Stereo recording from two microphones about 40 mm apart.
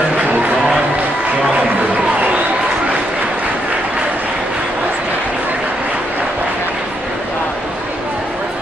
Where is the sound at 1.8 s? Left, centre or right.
Right.